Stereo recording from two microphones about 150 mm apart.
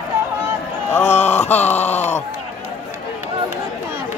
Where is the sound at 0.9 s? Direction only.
15° left (ahead or behind).